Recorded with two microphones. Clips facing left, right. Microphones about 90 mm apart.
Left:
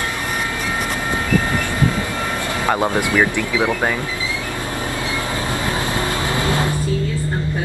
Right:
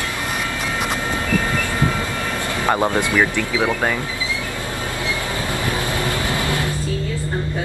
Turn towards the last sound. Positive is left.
turn(degrees=25)  # may be behind; listen again after turning